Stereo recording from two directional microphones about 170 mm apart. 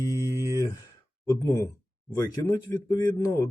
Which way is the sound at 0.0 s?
20° left (ahead or behind).